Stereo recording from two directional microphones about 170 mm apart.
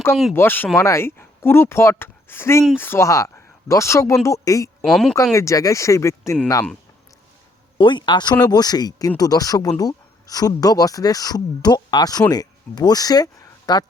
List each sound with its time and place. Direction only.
0.3 s speech: 10° left (ahead or behind)
4.8 s speech: centre (ahead or behind)
5.3 s speech: 15° left (ahead or behind)
7.8 s speech: 30° left (ahead or behind)